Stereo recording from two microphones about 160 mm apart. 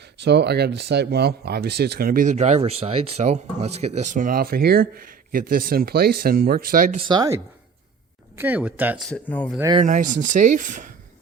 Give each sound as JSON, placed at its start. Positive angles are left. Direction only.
{"t": 0.3, "sound": "speech", "side_deg": -90}
{"t": 7.0, "sound": "speech", "side_deg": -25}
{"t": 8.4, "sound": "speech", "side_deg": -10}
{"t": 9.0, "sound": "speech", "side_deg": 10}
{"t": 9.8, "sound": "speech", "side_deg": -55}